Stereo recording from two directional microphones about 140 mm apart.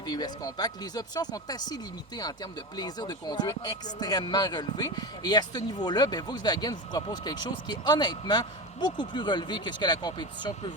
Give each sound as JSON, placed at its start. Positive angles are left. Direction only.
{"t": 0.0, "sound": "speech", "side_deg": 30}